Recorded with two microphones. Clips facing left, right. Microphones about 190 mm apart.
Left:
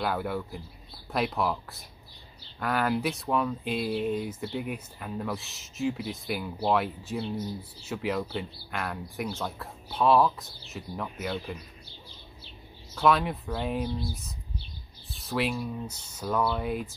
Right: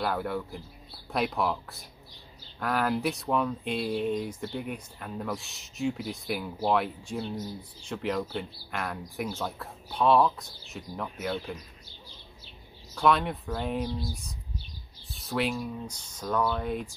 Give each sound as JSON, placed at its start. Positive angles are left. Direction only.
{"t": 0.0, "sound": "speech", "side_deg": 0}
{"t": 12.9, "sound": "speech", "side_deg": 0}